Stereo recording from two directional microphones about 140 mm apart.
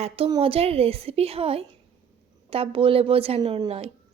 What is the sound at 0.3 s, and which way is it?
A woman's voice, 40° right (ahead or behind).